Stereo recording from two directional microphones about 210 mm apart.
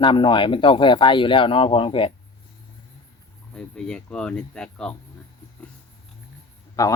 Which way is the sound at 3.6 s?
5° left (ahead or behind).